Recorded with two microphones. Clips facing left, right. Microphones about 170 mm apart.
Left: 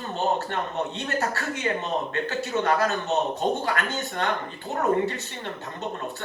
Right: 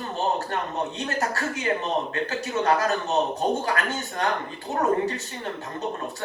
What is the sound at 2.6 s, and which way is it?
A man's voice, 35° right (ahead or behind).